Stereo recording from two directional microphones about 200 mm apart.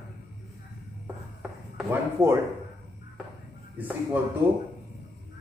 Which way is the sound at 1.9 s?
10° right (ahead or behind).